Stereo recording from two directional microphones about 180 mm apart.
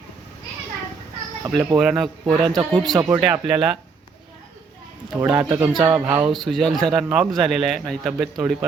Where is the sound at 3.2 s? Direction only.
5° right (ahead or behind).